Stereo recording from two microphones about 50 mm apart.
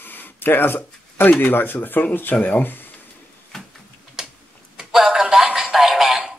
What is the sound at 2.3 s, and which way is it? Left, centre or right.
Speech, left.